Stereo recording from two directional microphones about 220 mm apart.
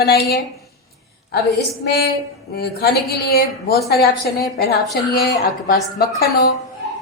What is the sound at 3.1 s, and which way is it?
A woman's voice, 45° left (ahead or behind).